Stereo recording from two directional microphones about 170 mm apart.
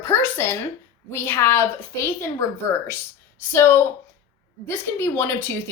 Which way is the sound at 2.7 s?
15° left (ahead or behind).